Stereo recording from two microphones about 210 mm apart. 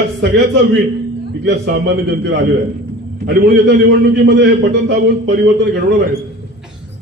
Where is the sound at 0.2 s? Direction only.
55° right (ahead or behind).